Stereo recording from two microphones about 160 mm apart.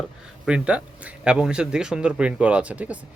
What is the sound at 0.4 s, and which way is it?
Speech, 5° right (ahead or behind).